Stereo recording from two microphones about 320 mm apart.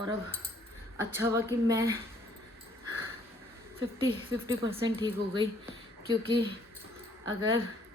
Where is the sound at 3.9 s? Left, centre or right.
Centre.